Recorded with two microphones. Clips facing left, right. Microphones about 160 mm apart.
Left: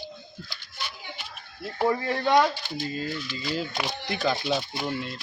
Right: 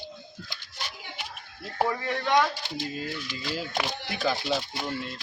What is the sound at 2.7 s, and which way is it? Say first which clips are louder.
Speech: left 2 dB; 5° right (ahead or behind).